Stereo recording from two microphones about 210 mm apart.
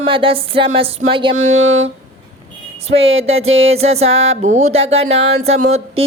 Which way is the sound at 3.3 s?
70° right (ahead or behind).